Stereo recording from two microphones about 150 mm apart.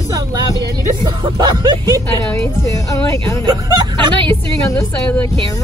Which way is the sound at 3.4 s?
25° right (ahead or behind).